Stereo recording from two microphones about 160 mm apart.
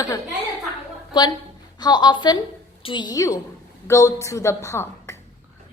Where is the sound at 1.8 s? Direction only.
25° left (ahead or behind).